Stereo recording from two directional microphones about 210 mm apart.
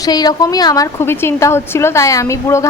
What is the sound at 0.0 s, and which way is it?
A woman's voice, 20° left (ahead or behind).